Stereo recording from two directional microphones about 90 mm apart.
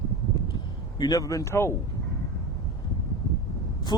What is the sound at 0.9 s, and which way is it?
Speech, 45° left (ahead or behind).